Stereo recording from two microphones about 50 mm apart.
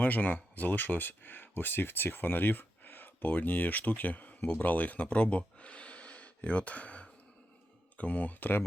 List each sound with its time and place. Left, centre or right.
0.0 s speech: left